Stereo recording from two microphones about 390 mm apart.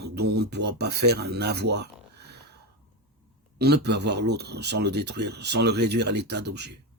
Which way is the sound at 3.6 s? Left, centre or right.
Right.